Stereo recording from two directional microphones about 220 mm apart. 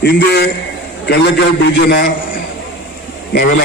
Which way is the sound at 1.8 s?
50° left (ahead or behind).